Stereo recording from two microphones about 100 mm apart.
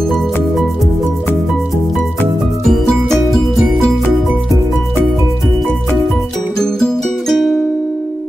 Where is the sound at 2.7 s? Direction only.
5° left (ahead or behind).